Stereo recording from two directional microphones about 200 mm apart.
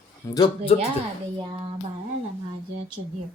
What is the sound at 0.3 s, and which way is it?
Speech, 20° left (ahead or behind).